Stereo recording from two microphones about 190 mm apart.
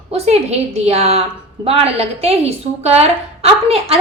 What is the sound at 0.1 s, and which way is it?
A woman's voice, 35° right (ahead or behind).